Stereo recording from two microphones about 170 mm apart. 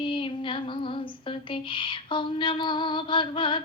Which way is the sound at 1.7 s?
30° left (ahead or behind).